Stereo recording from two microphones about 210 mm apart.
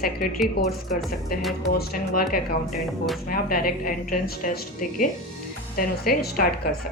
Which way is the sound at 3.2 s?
45° left (ahead or behind).